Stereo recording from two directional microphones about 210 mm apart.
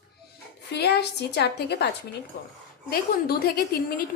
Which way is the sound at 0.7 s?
50° left (ahead or behind).